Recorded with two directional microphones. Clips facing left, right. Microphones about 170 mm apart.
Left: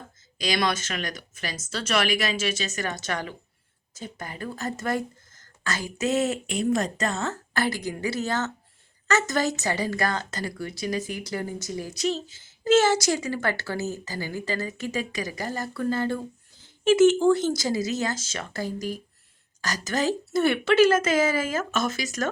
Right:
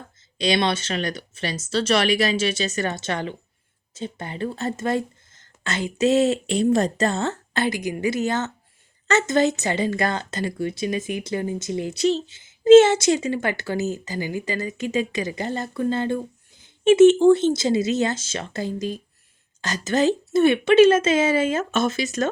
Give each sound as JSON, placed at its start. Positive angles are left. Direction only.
{"t": 0.3, "sound": "speech", "side_deg": -30}